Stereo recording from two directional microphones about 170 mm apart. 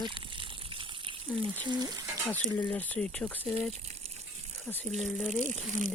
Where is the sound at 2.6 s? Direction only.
10° left (ahead or behind).